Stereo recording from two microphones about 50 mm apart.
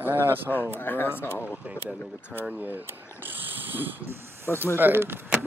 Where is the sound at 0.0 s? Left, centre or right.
Right.